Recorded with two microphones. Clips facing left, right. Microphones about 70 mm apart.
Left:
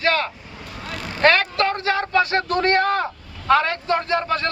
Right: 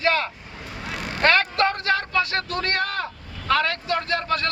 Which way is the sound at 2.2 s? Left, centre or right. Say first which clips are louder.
Left 6 dB; left.